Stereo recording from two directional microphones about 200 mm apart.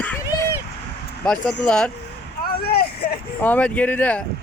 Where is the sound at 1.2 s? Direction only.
5° left (ahead or behind).